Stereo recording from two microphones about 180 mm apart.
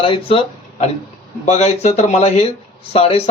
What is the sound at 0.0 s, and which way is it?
Speech, 30° left (ahead or behind).